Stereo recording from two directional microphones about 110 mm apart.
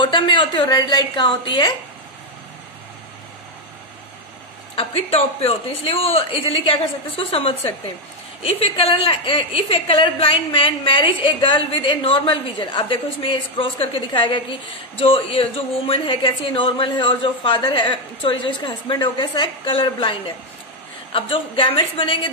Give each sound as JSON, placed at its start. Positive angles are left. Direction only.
{"t": 0.0, "sound": "a woman's voice", "side_deg": 50}
{"t": 4.7, "sound": "a woman's voice", "side_deg": 65}